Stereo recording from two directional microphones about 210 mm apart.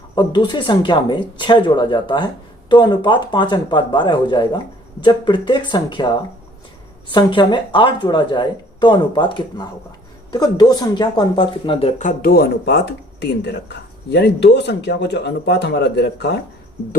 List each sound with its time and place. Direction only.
0.2 s speech: 20° left (ahead or behind)
7.1 s speech: 20° left (ahead or behind); by 16.4 s 50° left (ahead or behind)